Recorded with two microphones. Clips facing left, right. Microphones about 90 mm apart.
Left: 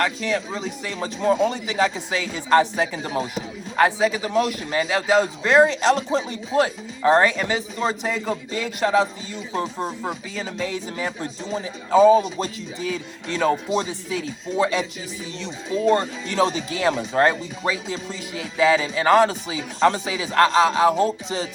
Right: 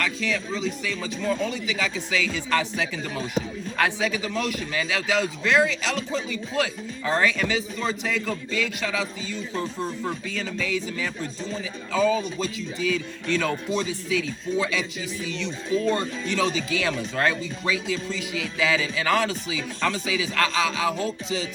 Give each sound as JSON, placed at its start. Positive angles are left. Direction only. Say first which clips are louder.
{"t": 0.2, "sound": "a man's voice", "louder": "left 2 dB", "side_deg": 35}
{"t": 10.3, "sound": "a man's voice", "louder": "left 1 dB", "side_deg": 30}